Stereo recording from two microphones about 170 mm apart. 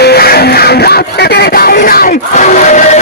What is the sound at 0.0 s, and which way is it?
Music, 70° left (ahead or behind).